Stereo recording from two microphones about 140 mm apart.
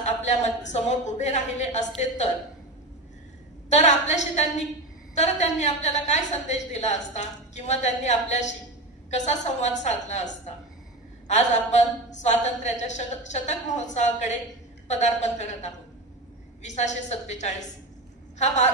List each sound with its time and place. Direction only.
0.0 s a woman's voice: 55° left (ahead or behind)
3.7 s a woman's voice: 55° left (ahead or behind)